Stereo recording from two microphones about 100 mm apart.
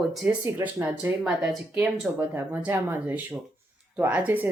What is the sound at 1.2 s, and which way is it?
Speech, 5° right (ahead or behind).